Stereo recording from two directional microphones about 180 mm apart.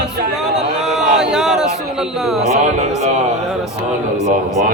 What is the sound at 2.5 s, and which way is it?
Speech, 40° right (ahead or behind).